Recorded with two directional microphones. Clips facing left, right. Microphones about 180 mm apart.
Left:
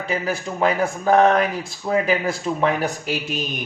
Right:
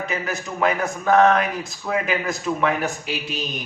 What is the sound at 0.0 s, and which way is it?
A man's voice, 30° left (ahead or behind).